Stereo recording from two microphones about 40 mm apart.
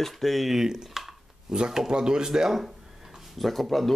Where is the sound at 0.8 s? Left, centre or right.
Centre.